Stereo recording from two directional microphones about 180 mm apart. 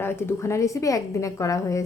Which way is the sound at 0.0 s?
15° left (ahead or behind).